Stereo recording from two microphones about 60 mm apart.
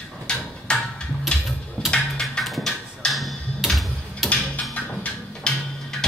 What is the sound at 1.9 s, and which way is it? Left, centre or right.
Music, centre.